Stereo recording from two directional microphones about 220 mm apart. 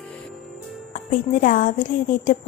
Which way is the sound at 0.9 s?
35° left (ahead or behind).